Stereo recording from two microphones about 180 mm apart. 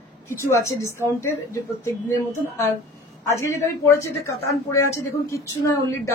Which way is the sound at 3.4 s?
15° left (ahead or behind).